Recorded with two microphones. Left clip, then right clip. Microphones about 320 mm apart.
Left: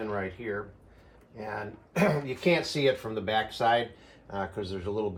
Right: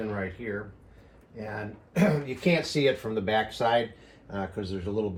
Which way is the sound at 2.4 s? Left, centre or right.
Centre.